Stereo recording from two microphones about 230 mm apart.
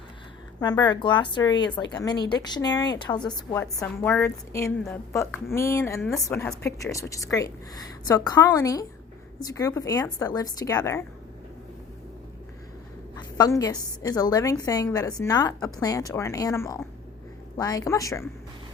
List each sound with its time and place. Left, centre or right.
0.6 s a woman's voice: centre
13.1 s a woman's voice: centre